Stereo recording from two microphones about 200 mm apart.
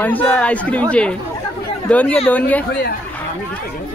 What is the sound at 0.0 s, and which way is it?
Speech, 10° left (ahead or behind).